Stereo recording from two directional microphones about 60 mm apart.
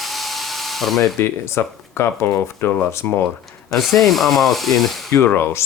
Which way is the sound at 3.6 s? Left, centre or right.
Centre.